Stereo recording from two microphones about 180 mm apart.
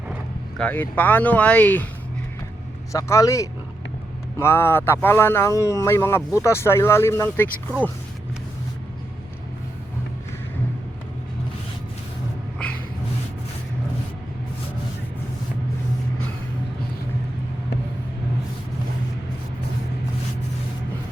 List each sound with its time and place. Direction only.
0.6 s speech: 10° left (ahead or behind)
2.9 s speech: 20° left (ahead or behind)